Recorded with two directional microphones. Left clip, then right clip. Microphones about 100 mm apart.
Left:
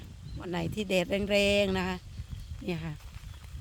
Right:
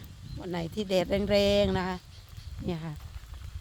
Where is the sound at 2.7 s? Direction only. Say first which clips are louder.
Even; 30° left (ahead or behind).